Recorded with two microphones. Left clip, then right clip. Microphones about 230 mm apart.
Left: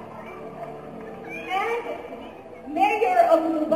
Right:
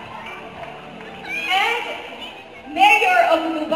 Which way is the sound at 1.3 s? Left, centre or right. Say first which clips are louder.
Right 7 dB; right.